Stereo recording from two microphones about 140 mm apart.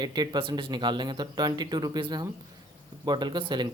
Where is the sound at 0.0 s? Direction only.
30° right (ahead or behind).